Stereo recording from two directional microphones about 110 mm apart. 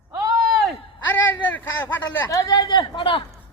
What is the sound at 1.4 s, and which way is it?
Speech, 15° left (ahead or behind).